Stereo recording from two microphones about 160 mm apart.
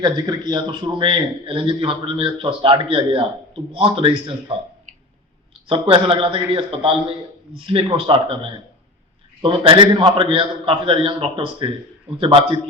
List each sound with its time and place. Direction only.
0.0 s a man's voice: 25° right (ahead or behind)
5.6 s a man's voice: 35° right (ahead or behind)